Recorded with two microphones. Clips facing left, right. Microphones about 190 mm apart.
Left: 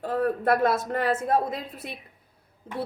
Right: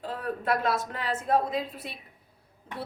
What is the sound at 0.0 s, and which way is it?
A woman's voice, 50° left (ahead or behind).